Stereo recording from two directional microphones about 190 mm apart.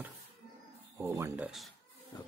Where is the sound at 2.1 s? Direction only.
20° left (ahead or behind).